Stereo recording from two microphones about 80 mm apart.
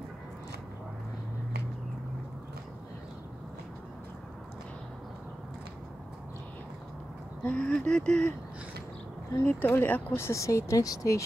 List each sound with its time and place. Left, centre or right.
7.4 s speech: centre
9.5 s speech: left
10.1 s speech: left